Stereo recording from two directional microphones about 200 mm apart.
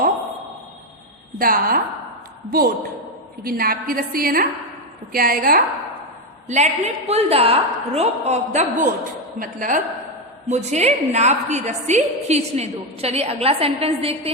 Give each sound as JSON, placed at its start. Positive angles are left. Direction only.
{"t": 1.4, "sound": "a woman's voice", "side_deg": -45}
{"t": 6.5, "sound": "a woman's voice", "side_deg": -35}